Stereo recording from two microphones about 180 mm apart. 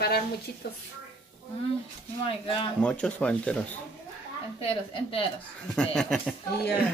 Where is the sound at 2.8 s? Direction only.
5° left (ahead or behind).